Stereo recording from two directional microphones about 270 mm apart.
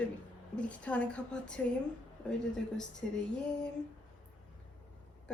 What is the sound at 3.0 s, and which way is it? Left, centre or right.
Speech, centre.